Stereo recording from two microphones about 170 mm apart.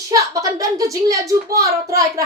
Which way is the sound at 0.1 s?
20° right (ahead or behind).